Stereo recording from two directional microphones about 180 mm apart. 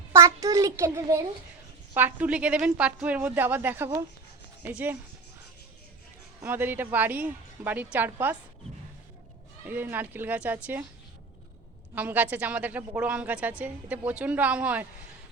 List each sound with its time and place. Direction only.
0.1 s a woman's voice: 15° right (ahead or behind)
6.4 s a woman's voice: 10° right (ahead or behind)
9.6 s a woman's voice: 10° right (ahead or behind)
11.9 s a woman's voice: 10° right (ahead or behind)